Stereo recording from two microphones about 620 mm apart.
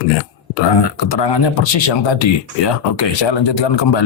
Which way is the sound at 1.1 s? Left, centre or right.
Left.